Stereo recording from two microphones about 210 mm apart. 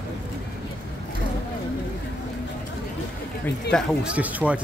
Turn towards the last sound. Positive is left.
turn(degrees=-5)  # may be behind; listen again after turning